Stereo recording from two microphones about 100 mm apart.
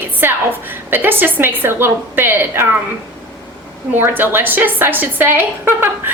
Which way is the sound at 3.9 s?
20° right (ahead or behind).